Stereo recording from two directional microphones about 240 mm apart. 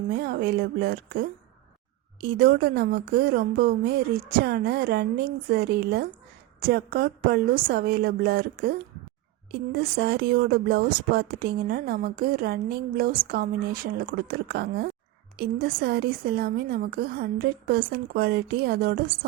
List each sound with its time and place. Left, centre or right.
0.1 s a woman's voice: right
9.9 s a woman's voice: right